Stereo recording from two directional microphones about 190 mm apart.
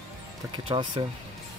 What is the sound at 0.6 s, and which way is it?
Speech, 25° right (ahead or behind).